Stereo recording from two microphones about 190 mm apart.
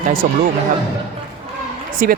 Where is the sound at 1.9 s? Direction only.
45° right (ahead or behind).